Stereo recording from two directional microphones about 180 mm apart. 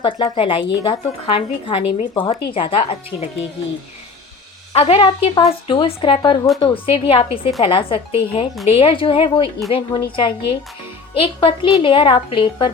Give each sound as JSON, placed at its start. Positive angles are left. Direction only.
{"t": 0.0, "sound": "a woman's voice", "side_deg": 30}
{"t": 4.7, "sound": "a woman's voice", "side_deg": 35}